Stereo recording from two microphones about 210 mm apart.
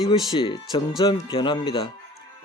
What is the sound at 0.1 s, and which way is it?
Speech, 25° left (ahead or behind).